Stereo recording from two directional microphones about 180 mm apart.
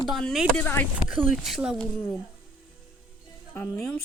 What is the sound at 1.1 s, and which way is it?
Speech, centre (ahead or behind).